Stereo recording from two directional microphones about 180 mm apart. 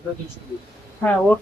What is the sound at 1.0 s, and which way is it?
Speech, 5° left (ahead or behind).